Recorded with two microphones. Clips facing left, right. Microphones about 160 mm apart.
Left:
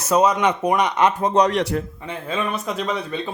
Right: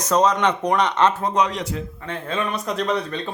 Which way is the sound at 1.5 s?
65° left (ahead or behind).